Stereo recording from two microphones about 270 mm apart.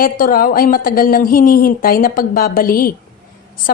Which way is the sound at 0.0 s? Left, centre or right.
Left.